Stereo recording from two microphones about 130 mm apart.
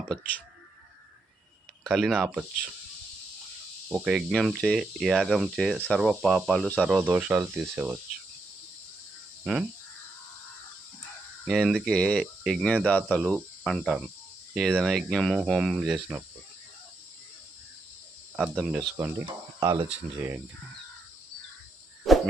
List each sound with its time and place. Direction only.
0.1 s speech: 5° left (ahead or behind)
1.8 s speech: 5° left (ahead or behind)
2.2 s speech: 10° right (ahead or behind)
3.8 s speech: 5° right (ahead or behind)
9.4 s speech: 5° right (ahead or behind)
11.4 s speech: centre (ahead or behind)
18.3 s speech: 5° right (ahead or behind)
19.2 s speech: 30° right (ahead or behind)